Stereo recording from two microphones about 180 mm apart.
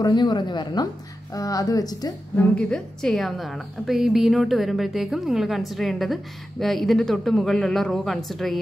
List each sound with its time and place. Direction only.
0.0 s speech: 25° left (ahead or behind)
2.3 s a woman's voice: 5° left (ahead or behind)